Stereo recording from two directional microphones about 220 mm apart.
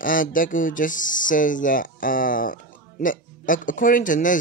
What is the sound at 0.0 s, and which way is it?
Speech, 40° left (ahead or behind).